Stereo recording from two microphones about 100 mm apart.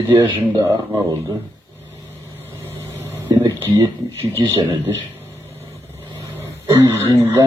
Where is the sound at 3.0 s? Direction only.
25° right (ahead or behind).